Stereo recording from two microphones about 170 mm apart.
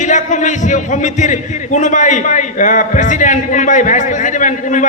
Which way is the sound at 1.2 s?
45° left (ahead or behind).